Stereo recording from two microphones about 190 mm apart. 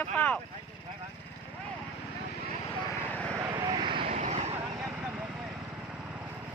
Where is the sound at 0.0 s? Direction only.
10° left (ahead or behind).